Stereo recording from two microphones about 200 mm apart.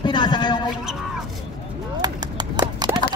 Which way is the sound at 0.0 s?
20° left (ahead or behind).